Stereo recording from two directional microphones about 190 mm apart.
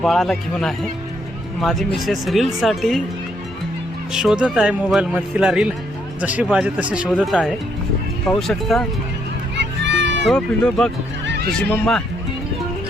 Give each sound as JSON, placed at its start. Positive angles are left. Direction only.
{"t": 0.0, "sound": "speech", "side_deg": 0}
{"t": 4.1, "sound": "speech", "side_deg": -5}
{"t": 9.6, "sound": "music", "side_deg": -70}
{"t": 10.2, "sound": "speech", "side_deg": 5}
{"t": 11.3, "sound": "neigh", "side_deg": -55}
{"t": 11.6, "sound": "speech", "side_deg": 5}